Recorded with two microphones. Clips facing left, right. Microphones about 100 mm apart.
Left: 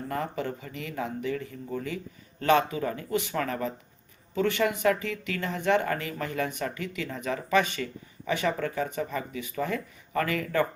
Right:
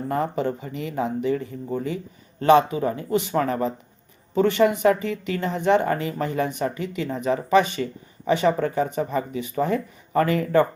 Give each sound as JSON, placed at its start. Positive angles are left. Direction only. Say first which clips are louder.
{"t": 0.1, "sound": "speech", "louder": "right 7 dB", "side_deg": -30}